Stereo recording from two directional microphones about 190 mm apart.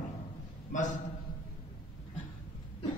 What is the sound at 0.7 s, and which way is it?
Speech, 40° left (ahead or behind).